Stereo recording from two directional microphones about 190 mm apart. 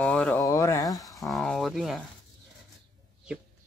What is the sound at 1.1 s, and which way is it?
Speech, centre (ahead or behind).